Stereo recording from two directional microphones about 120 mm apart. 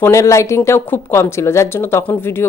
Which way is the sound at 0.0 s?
25° left (ahead or behind).